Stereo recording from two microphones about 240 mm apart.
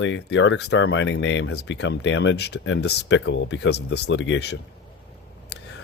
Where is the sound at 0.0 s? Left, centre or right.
Left.